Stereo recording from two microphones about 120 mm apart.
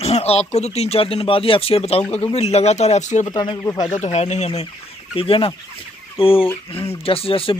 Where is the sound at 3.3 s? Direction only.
35° left (ahead or behind).